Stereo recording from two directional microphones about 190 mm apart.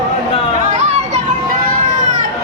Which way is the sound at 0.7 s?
35° right (ahead or behind).